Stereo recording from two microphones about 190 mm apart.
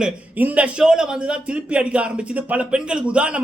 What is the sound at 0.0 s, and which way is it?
Speech, 10° right (ahead or behind).